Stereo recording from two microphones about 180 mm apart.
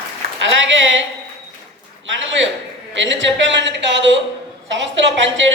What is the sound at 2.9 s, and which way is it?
A woman's voice, 90° right.